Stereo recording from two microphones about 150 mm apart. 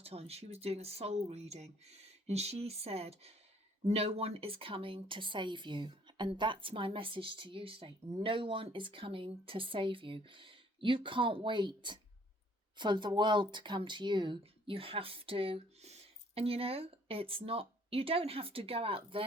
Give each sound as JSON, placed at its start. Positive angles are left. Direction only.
{"t": 0.0, "sound": "speech", "side_deg": -45}